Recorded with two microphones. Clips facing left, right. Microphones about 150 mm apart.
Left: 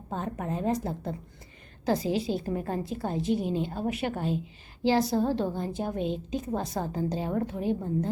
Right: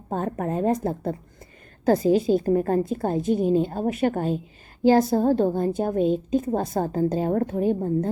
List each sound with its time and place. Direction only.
0.1 s a woman's voice: 50° right (ahead or behind)